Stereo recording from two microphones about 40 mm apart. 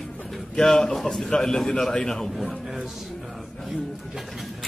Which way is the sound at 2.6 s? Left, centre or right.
Centre.